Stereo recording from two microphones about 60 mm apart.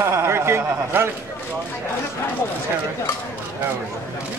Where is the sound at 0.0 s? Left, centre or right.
Right.